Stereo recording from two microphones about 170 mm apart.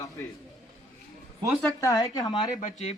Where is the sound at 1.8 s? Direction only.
20° left (ahead or behind).